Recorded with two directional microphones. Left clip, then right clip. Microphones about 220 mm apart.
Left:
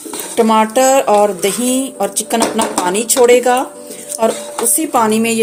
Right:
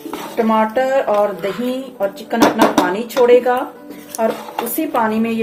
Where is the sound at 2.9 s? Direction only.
50° left (ahead or behind).